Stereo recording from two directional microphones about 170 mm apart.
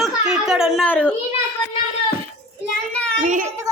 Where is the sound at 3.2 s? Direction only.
50° right (ahead or behind).